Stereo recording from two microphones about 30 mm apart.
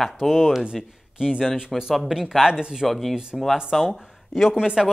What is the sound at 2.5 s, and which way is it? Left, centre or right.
Speech, right.